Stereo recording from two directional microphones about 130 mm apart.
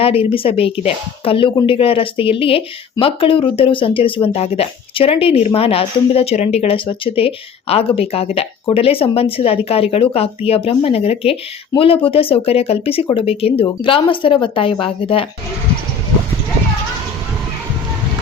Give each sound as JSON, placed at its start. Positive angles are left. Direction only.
{"t": 0.0, "sound": "speech", "side_deg": 45}